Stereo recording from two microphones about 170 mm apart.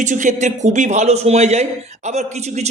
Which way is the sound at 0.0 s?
45° right (ahead or behind).